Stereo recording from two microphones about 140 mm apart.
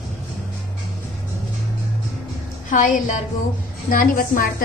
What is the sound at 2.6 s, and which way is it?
Speech, 65° left (ahead or behind).